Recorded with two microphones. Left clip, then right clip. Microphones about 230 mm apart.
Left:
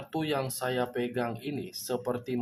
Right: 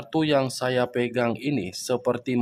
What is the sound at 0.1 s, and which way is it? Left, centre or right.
Speech, right.